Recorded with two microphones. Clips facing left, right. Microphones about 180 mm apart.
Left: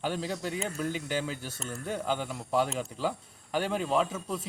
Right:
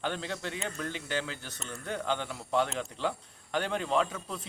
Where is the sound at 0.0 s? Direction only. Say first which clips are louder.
Left 2 dB; 5° left (ahead or behind).